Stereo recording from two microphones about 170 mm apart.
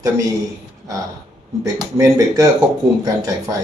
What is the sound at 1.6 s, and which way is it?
Speech, 20° right (ahead or behind).